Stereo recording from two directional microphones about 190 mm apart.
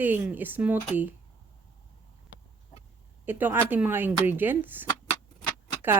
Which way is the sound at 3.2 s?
10° right (ahead or behind).